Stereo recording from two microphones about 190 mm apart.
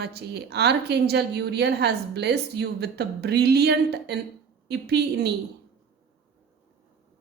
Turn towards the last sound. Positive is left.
turn(degrees=-60)  # may be behind; listen again after turning